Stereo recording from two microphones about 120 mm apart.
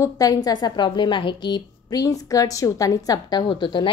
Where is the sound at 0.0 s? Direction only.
30° left (ahead or behind).